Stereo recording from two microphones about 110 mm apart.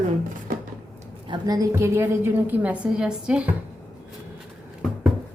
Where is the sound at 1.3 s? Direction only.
35° right (ahead or behind).